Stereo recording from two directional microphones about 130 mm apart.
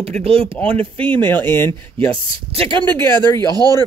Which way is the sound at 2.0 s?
40° right (ahead or behind).